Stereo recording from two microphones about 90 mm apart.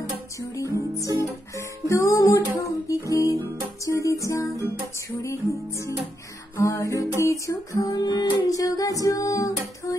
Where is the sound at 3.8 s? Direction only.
35° left (ahead or behind).